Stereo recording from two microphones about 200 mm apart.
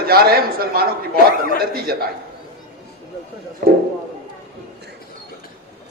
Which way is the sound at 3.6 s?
50° right (ahead or behind).